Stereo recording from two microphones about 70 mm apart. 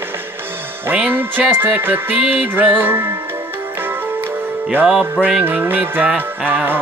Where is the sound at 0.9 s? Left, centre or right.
Right.